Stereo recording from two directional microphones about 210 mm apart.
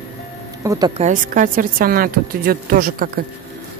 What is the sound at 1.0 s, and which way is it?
A woman's voice, 40° right (ahead or behind).